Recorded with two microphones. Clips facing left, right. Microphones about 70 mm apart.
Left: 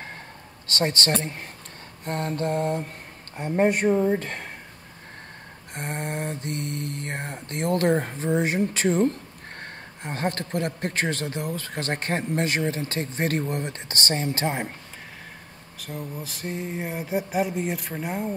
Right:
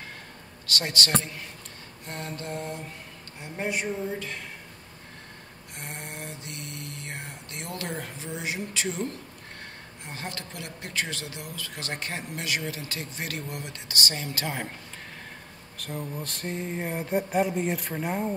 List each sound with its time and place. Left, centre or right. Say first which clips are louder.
0.7 s a man's voice: left 4 dB; left
2.0 s mantra: left 9 dB; left
5.8 s mantra: left 9 dB; left
9.6 s a man's voice: left 7 dB; left
15.8 s a sound: even; centre